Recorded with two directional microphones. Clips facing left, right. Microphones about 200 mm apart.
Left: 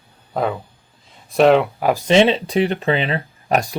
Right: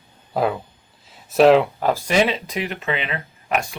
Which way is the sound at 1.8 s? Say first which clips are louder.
Left 5 dB; 15° left (ahead or behind).